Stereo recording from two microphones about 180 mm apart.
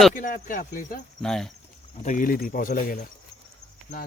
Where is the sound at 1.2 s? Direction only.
5° left (ahead or behind).